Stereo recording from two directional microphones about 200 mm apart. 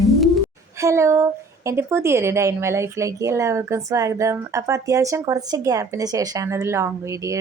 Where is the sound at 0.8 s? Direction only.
15° right (ahead or behind).